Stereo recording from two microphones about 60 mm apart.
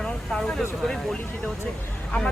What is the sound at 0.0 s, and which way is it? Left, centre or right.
Vehicle, centre.